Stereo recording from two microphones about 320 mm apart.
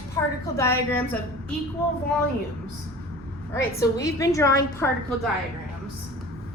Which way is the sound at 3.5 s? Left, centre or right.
Centre.